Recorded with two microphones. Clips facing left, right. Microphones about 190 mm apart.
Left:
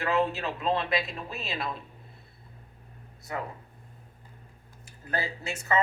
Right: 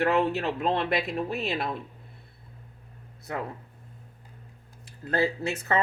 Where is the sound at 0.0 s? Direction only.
65° right (ahead or behind).